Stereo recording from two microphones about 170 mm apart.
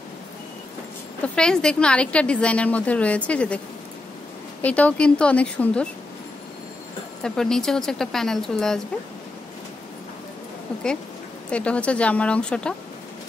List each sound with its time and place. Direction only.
1.2 s a woman's voice: 5° left (ahead or behind)
7.2 s speech: 5° left (ahead or behind)
11.5 s a woman's voice: 5° left (ahead or behind)